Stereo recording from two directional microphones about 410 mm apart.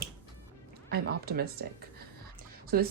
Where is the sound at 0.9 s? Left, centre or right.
Right.